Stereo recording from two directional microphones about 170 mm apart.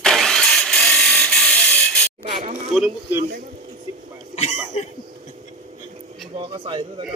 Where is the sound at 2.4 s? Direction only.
40° right (ahead or behind).